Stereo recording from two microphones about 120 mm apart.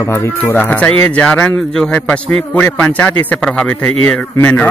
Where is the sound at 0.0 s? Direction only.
25° left (ahead or behind).